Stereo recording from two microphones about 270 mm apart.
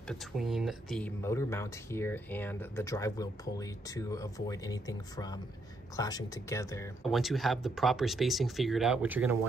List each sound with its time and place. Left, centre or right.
0.1 s speech: centre
7.0 s speech: centre